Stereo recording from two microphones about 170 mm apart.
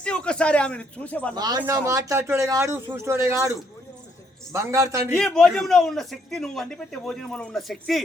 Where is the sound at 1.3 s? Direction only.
25° right (ahead or behind).